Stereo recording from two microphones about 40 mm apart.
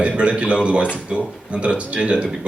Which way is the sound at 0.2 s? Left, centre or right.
Right.